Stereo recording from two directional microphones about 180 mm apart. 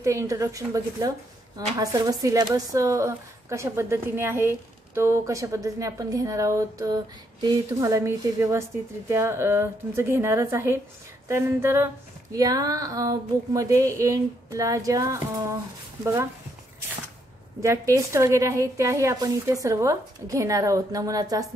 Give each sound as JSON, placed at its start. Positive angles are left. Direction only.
{"t": 0.0, "sound": "a woman's voice", "side_deg": -15}
{"t": 11.2, "sound": "female singing", "side_deg": -15}
{"t": 16.0, "sound": "a woman's voice", "side_deg": -15}
{"t": 17.6, "sound": "a woman's voice", "side_deg": -15}